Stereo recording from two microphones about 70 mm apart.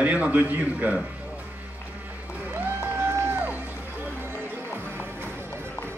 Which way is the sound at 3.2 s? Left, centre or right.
Right.